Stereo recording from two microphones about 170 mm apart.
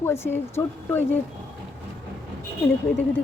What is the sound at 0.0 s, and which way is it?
Speech, 15° left (ahead or behind).